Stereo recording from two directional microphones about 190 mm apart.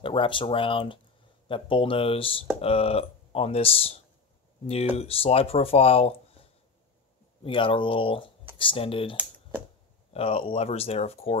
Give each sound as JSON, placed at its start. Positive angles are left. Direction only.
{"t": 0.0, "sound": "speech", "side_deg": 25}
{"t": 7.4, "sound": "speech", "side_deg": 25}
{"t": 10.1, "sound": "speech", "side_deg": 30}